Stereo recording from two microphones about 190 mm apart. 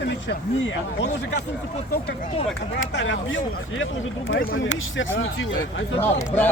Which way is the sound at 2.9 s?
85° left.